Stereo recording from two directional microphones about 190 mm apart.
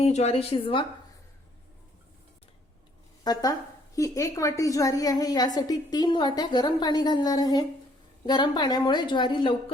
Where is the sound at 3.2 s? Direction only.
20° left (ahead or behind).